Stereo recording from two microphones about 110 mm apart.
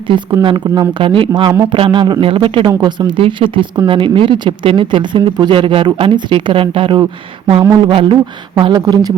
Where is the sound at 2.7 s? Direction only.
40° right (ahead or behind).